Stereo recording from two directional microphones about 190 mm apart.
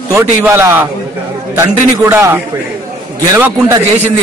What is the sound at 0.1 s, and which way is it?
A man's voice, 15° right (ahead or behind).